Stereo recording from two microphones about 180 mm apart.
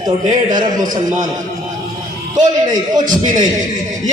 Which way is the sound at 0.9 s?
45° right (ahead or behind).